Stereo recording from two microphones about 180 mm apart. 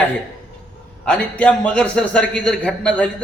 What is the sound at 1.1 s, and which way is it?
A man's voice, 5° left (ahead or behind).